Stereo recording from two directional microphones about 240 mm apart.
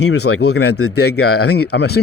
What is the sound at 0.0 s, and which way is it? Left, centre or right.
Speech, left.